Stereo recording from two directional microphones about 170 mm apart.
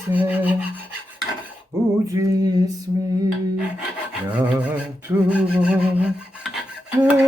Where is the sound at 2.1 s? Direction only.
20° right (ahead or behind).